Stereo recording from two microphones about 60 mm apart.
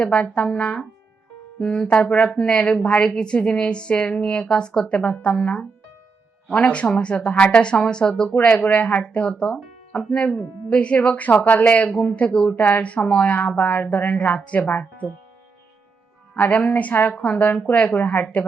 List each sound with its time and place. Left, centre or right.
0.0 s a woman's voice: left
8.4 s speech: left
16.3 s speech: left